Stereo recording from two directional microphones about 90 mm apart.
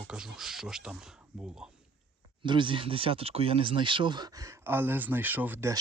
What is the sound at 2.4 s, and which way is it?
Speech, 65° right (ahead or behind).